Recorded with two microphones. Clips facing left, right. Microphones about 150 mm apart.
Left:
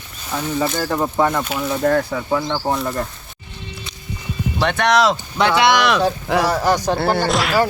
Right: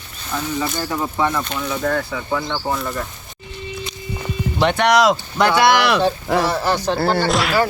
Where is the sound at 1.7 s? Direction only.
40° left (ahead or behind).